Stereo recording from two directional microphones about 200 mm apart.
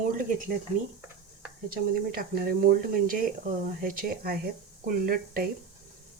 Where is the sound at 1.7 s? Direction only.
50° right (ahead or behind).